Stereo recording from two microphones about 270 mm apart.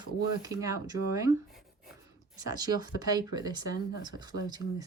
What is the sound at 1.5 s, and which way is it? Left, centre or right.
Writing, centre.